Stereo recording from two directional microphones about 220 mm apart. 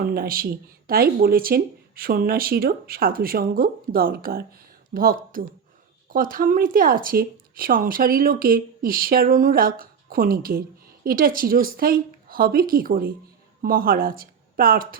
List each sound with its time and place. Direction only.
0.1 s speech: 40° right (ahead or behind)